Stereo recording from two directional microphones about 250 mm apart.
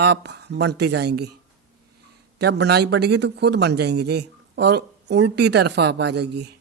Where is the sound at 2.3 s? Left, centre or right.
Right.